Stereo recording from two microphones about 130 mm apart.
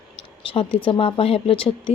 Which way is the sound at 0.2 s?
45° left (ahead or behind).